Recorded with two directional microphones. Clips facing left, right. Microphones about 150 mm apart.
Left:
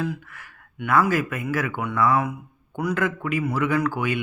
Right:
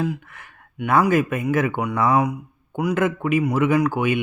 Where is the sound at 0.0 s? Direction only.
20° right (ahead or behind).